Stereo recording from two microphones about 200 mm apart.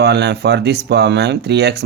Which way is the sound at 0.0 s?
55° right (ahead or behind).